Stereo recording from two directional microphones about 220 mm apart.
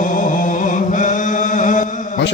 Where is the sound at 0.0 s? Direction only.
35° left (ahead or behind).